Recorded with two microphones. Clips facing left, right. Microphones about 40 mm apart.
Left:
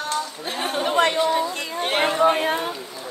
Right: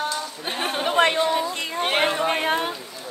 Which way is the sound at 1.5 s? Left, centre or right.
Right.